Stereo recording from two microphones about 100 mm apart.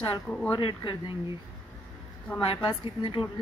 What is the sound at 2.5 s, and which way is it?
Speech, 55° left (ahead or behind).